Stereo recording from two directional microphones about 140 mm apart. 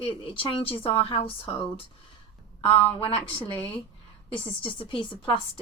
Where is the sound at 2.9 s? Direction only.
40° left (ahead or behind).